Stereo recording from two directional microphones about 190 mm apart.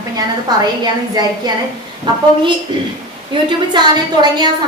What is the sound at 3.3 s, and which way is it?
A woman's voice, 25° right (ahead or behind).